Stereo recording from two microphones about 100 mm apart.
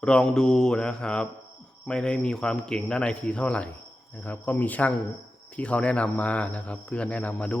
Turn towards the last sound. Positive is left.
turn(degrees=15)  # may be behind; listen again after turning